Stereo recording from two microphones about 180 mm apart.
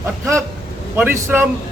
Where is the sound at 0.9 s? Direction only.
10° right (ahead or behind).